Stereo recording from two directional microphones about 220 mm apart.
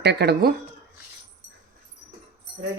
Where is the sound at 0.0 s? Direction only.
50° right (ahead or behind).